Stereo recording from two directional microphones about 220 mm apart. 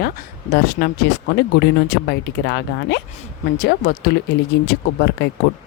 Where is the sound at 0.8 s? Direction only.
50° left (ahead or behind).